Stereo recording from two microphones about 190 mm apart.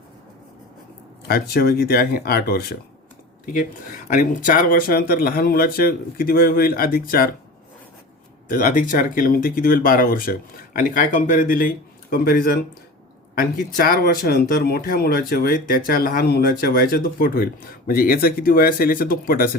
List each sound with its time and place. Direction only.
1.3 s speech: 55° left (ahead or behind)
3.4 s speech: 45° left (ahead or behind)
8.4 s speech: 45° left (ahead or behind)